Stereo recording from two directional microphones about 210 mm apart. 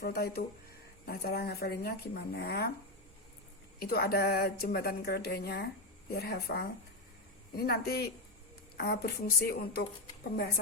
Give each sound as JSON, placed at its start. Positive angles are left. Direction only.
{"t": 0.0, "sound": "speech", "side_deg": 50}
{"t": 3.8, "sound": "speech", "side_deg": 50}